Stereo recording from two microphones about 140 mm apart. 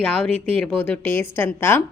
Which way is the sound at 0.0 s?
10° left (ahead or behind).